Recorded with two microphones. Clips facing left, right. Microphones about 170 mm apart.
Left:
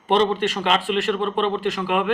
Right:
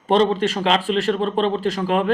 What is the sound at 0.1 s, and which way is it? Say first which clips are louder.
Speech: right 2 dB; 35° right (ahead or behind).